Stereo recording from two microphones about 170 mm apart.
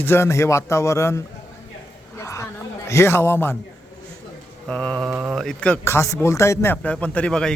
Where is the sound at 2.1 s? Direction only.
15° left (ahead or behind).